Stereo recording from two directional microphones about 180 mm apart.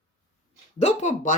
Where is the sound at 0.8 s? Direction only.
40° left (ahead or behind).